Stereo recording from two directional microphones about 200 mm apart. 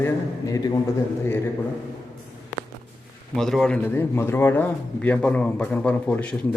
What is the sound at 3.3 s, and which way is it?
Speech, centre (ahead or behind).